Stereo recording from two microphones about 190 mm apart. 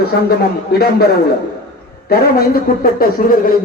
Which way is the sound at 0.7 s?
55° left (ahead or behind).